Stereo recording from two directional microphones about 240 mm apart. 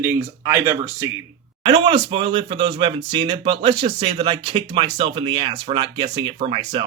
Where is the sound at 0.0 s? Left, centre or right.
Centre.